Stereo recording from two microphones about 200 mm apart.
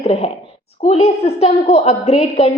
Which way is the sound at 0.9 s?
30° left (ahead or behind).